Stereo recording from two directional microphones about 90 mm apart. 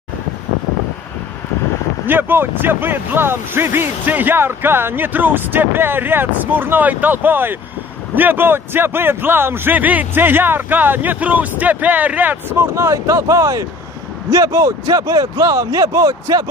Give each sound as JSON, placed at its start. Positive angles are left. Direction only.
{"t": 2.0, "sound": "speech", "side_deg": -20}